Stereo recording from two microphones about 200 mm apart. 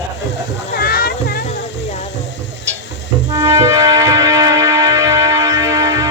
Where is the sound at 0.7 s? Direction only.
50° left (ahead or behind).